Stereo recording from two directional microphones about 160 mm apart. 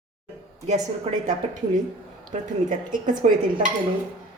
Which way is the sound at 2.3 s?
50° right (ahead or behind).